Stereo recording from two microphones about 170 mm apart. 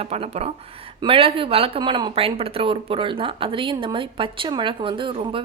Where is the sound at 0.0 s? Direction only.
35° right (ahead or behind).